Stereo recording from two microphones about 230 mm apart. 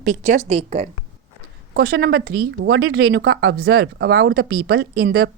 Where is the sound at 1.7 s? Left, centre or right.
Right.